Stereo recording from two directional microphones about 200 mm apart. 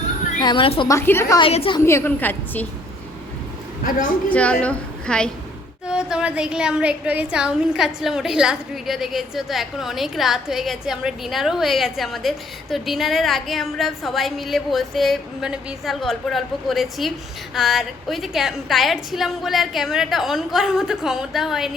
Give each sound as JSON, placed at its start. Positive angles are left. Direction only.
{"t": 0.3, "sound": "a woman's voice", "side_deg": 25}
{"t": 0.9, "sound": "a woman's voice", "side_deg": 10}
{"t": 1.4, "sound": "a woman's voice", "side_deg": 30}
{"t": 1.8, "sound": "a woman's voice", "side_deg": 10}
{"t": 4.3, "sound": "a woman's voice", "side_deg": 5}